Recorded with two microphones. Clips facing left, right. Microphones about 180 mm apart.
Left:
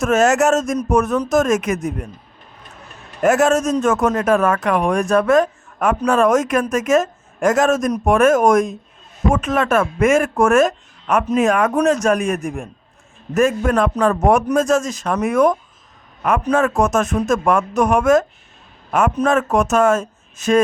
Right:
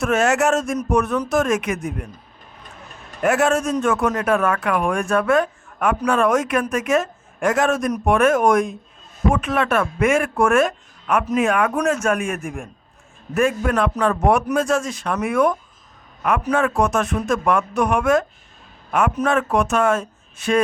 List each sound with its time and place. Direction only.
0.0 s a man's voice: 45° left (ahead or behind)
3.2 s a man's voice: 40° left (ahead or behind)
16.6 s a man's voice: 45° left (ahead or behind)